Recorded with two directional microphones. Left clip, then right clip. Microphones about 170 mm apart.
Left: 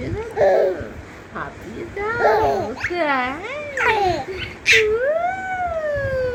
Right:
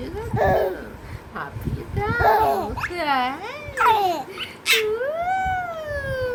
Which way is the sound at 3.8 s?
30° right (ahead or behind).